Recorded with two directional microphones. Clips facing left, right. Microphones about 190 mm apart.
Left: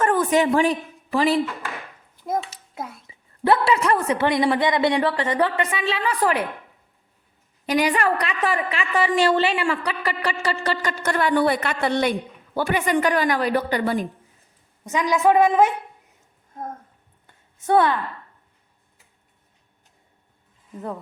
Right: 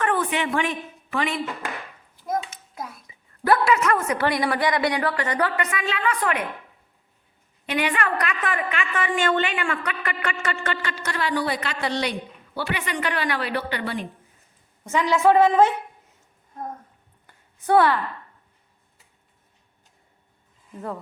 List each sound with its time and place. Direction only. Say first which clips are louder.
0.0 s a woman's voice: left 5 dB; 40° left (ahead or behind)
7.7 s a woman's voice: left 4 dB; 40° left (ahead or behind)
14.8 s a woman's voice: even; 15° left (ahead or behind)
17.2 s a sound: even; 20° left (ahead or behind)